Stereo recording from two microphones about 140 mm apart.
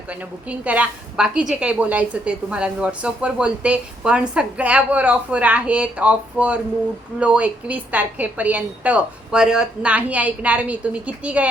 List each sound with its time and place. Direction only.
0.1 s a woman's voice: 10° right (ahead or behind)